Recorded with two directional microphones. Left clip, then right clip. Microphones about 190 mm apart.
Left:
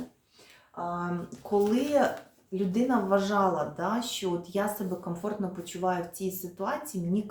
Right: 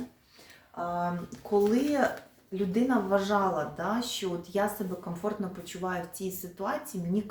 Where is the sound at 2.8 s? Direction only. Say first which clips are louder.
Left 2 dB; 15° left (ahead or behind).